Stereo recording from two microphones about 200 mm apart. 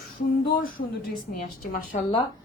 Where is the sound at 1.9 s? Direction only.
45° left (ahead or behind).